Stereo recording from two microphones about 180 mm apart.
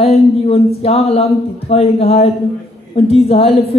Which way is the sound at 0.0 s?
35° left (ahead or behind).